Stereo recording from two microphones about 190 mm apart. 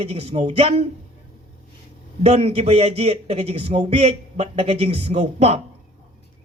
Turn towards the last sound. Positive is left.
turn(degrees=-35)  # may be behind; listen again after turning